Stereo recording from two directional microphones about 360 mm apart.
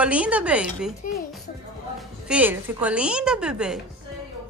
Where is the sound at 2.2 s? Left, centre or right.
Centre.